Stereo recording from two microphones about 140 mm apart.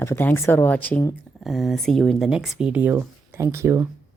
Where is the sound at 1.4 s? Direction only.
Centre (ahead or behind); by 3.8 s 20° right (ahead or behind).